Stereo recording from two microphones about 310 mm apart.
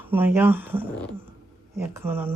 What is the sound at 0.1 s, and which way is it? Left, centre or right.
Speech, centre.